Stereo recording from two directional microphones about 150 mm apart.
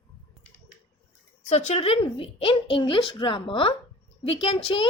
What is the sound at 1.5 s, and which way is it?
A woman's voice, 50° left (ahead or behind).